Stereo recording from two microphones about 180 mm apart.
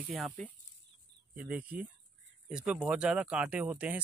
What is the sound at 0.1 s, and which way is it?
Speech, centre (ahead or behind).